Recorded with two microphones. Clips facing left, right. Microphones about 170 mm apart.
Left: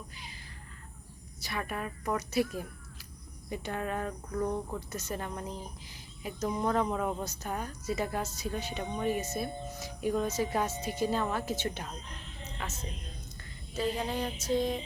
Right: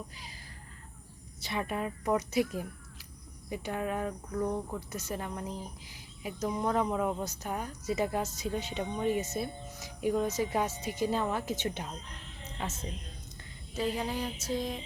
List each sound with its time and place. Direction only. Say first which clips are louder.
1.4 s speech: right 3 dB; 25° right (ahead or behind)
12.5 s a woman's voice: right 3 dB; 30° right (ahead or behind)
13.7 s speech: even; 10° right (ahead or behind)
14.4 s music: left 6 dB; centre (ahead or behind)